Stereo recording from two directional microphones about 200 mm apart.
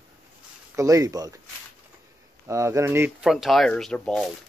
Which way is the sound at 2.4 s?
15° right (ahead or behind).